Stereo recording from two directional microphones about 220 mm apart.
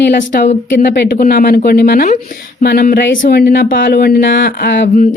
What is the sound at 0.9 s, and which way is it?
Speech, 50° left (ahead or behind).